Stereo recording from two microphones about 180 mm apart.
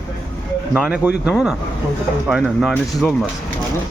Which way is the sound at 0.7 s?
10° right (ahead or behind).